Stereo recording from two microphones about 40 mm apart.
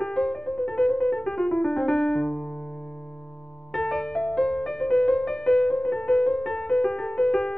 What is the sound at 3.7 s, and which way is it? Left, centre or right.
Music, centre.